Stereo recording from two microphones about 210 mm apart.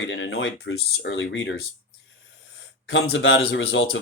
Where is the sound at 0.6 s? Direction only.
60° left (ahead or behind).